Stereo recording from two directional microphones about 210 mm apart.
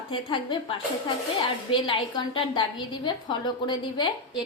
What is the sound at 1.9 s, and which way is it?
A woman's voice, 20° left (ahead or behind).